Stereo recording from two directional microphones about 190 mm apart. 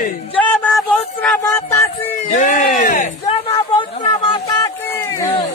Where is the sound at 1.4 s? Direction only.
15° left (ahead or behind).